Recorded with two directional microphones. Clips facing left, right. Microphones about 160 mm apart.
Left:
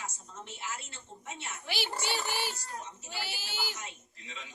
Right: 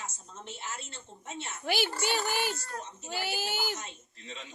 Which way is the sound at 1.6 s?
50° right (ahead or behind).